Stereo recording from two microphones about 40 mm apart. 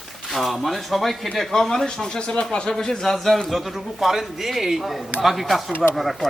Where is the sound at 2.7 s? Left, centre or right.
Centre.